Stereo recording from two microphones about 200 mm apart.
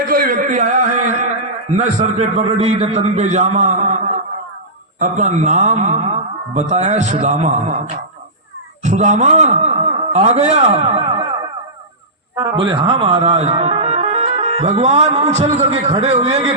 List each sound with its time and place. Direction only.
0.1 s a sound: 45° right (ahead or behind)
1.7 s speech: 35° right (ahead or behind)
4.9 s speech: 35° right (ahead or behind)
8.8 s a man's voice: 35° right (ahead or behind)
12.4 s speech: 20° right (ahead or behind)